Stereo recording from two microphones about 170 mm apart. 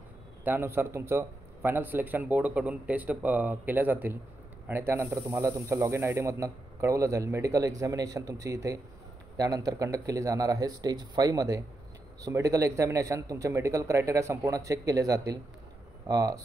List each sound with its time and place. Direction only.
0.4 s a man's voice: 15° right (ahead or behind)